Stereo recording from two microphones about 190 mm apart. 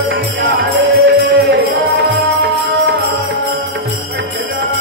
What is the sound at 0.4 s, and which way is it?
Music, 65° right (ahead or behind).